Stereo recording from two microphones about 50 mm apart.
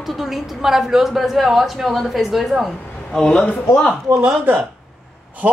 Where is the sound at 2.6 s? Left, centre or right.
Centre.